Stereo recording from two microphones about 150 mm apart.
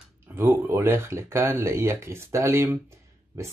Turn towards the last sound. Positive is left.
turn(degrees=-20)  # may be behind; listen again after turning